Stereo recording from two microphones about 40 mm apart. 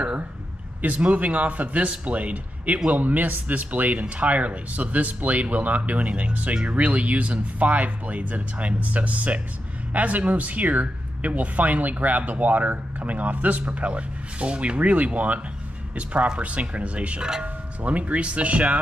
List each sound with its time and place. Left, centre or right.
0.8 s speech: right